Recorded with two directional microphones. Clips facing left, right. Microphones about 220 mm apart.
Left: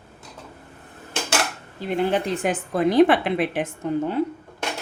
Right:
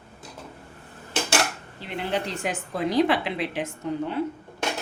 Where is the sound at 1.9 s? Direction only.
50° left (ahead or behind).